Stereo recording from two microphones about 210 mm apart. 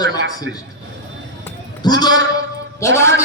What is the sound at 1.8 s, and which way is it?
A man's voice, 20° left (ahead or behind).